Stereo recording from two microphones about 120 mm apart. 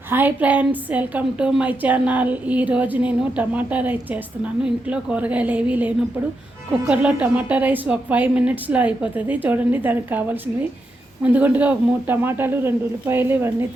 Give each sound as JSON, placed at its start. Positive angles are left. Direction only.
{"t": 0.1, "sound": "a woman's voice", "side_deg": -15}